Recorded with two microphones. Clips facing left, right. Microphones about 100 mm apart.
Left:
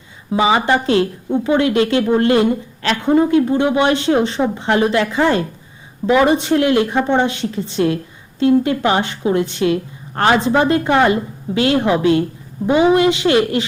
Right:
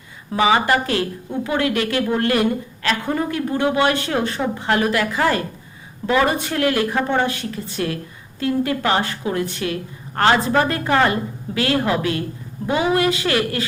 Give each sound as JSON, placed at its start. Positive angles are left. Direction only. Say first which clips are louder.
{"t": 0.3, "sound": "a woman's voice", "louder": "left 2 dB", "side_deg": 20}